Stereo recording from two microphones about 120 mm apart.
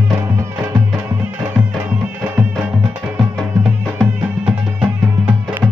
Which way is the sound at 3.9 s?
10° right (ahead or behind).